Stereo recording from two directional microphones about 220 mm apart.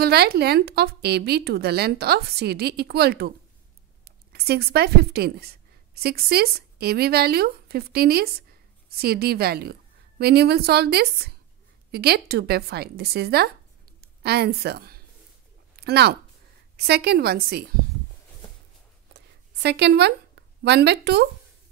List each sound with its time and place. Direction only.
0.0 s a woman's voice: 45° right (ahead or behind)
19.1 s a sound: 50° right (ahead or behind)
20.6 s a woman's voice: 50° right (ahead or behind)